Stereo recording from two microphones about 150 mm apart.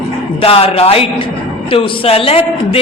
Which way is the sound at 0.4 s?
40° left (ahead or behind).